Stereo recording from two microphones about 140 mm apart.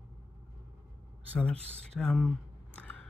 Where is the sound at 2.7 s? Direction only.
10° left (ahead or behind).